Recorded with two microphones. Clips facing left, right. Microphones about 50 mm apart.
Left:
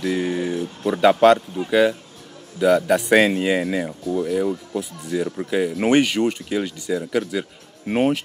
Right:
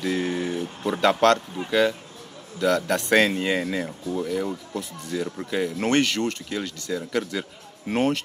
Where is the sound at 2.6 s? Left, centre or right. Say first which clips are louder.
Left 6 dB; centre.